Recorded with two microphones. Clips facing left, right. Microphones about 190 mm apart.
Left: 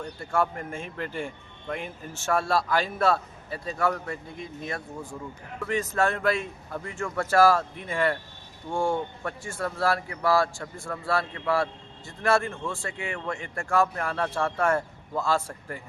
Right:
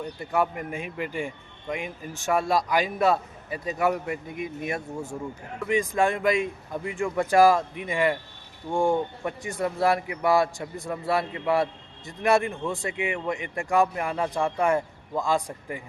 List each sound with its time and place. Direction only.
0.0 s speech: 15° right (ahead or behind)